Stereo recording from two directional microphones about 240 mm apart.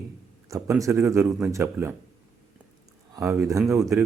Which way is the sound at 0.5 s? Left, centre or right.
Centre.